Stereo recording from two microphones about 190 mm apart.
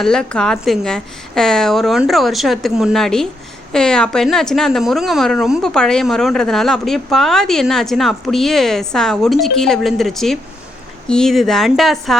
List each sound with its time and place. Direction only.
0.0 s a woman's voice: 5° left (ahead or behind)